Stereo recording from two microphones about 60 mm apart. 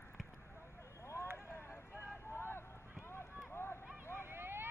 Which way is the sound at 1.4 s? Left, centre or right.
Left.